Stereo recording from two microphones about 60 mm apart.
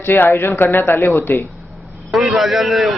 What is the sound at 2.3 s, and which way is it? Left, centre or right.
Speech, centre.